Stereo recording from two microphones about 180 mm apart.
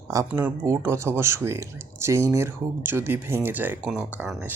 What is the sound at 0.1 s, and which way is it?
Speech, 15° right (ahead or behind).